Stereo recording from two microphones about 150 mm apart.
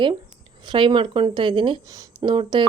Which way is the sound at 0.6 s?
35° right (ahead or behind).